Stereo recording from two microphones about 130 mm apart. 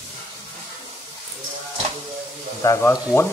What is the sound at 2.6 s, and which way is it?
Speech, 25° left (ahead or behind).